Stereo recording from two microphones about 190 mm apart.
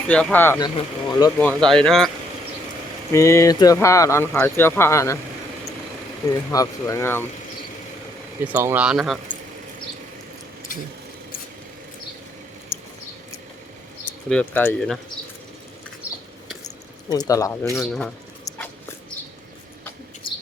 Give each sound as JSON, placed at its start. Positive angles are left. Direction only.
{"t": 0.1, "sound": "speech", "side_deg": 5}
{"t": 0.6, "sound": "speech", "side_deg": 20}
{"t": 1.4, "sound": "speech", "side_deg": 5}
{"t": 3.1, "sound": "speech", "side_deg": 15}
{"t": 6.5, "sound": "speech", "side_deg": 20}
{"t": 8.5, "sound": "speech", "side_deg": -10}
{"t": 14.3, "sound": "speech", "side_deg": 10}
{"t": 16.6, "sound": "a sound", "side_deg": 20}
{"t": 17.7, "sound": "speech", "side_deg": 5}